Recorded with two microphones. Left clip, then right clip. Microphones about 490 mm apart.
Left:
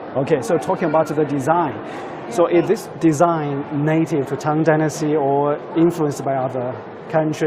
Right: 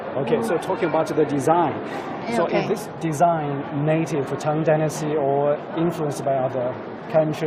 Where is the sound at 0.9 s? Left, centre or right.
Centre.